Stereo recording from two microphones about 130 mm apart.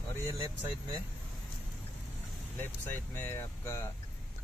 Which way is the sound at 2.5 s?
15° left (ahead or behind).